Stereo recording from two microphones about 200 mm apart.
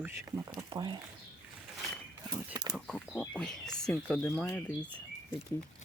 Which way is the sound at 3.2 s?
5° left (ahead or behind).